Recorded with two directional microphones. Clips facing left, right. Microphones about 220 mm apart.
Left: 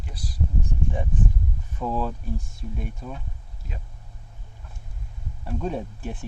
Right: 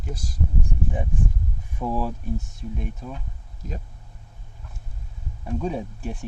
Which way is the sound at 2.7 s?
Centre (ahead or behind).